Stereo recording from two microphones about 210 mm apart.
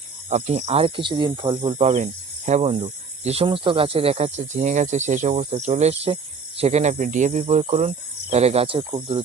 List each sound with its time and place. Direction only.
0.3 s speech: 30° right (ahead or behind)